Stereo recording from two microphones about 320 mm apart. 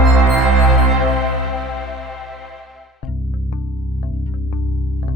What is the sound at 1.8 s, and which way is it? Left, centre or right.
Music, centre.